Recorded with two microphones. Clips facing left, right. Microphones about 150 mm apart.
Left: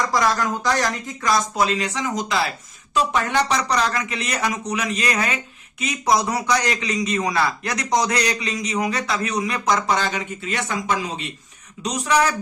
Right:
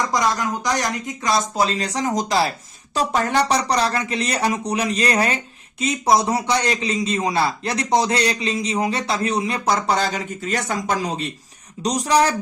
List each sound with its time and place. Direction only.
0.1 s a man's voice: 20° right (ahead or behind); by 12.3 s 35° right (ahead or behind)